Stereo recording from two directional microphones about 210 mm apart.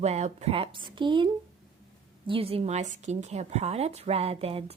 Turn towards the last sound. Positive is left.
turn(degrees=-30)  # may be behind; listen again after turning